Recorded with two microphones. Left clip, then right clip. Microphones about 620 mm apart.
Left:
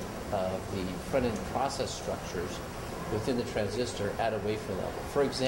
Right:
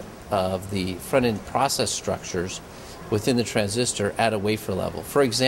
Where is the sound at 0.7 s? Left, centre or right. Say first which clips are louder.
Right 9 dB; right.